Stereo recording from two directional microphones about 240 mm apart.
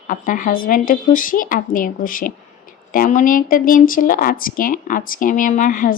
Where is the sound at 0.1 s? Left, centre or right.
Left.